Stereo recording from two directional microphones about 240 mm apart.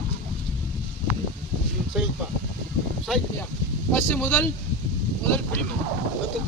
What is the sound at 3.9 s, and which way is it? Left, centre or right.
Speech, centre.